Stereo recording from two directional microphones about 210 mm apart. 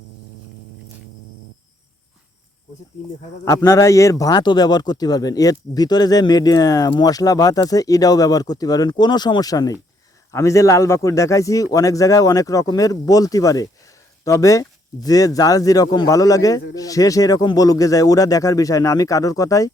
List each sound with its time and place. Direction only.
3.4 s a man's voice: 15° left (ahead or behind)